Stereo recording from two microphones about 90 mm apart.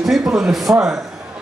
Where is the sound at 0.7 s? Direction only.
20° right (ahead or behind).